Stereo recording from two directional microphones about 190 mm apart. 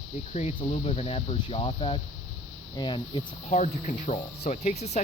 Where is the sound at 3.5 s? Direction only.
40° left (ahead or behind).